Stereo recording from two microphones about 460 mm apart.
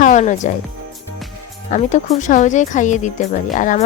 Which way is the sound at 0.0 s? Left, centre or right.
Centre.